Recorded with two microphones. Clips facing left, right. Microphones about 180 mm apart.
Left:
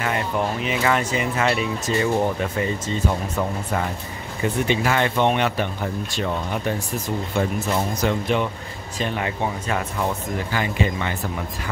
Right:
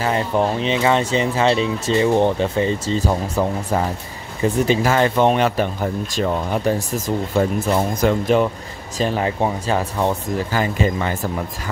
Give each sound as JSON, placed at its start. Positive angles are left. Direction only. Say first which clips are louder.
{"t": 0.0, "sound": "speech", "louder": "right 5 dB", "side_deg": -30}
{"t": 7.3, "sound": "speech", "louder": "right 4 dB", "side_deg": -35}